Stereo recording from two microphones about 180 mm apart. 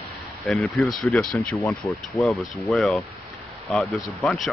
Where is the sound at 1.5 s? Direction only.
15° left (ahead or behind).